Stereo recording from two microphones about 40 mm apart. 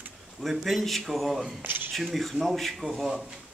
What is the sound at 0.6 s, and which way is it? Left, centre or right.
Speech, centre.